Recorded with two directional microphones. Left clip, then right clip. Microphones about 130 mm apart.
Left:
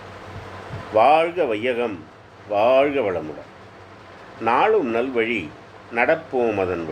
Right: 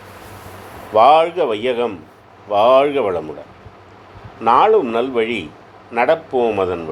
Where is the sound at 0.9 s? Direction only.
45° right (ahead or behind).